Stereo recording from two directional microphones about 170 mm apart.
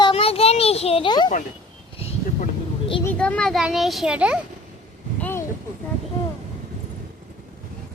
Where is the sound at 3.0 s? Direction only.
10° left (ahead or behind).